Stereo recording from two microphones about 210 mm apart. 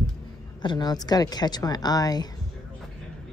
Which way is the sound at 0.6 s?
20° left (ahead or behind).